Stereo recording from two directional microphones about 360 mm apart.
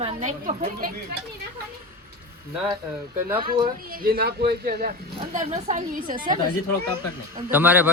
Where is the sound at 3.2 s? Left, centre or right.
Centre.